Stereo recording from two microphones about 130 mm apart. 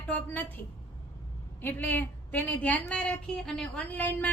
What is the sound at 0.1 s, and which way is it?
Speech, 15° left (ahead or behind).